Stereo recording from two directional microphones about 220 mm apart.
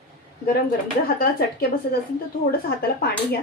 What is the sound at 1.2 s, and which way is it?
Speech, 45° left (ahead or behind).